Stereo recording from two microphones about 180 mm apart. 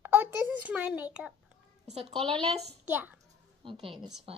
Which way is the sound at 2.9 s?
10° right (ahead or behind).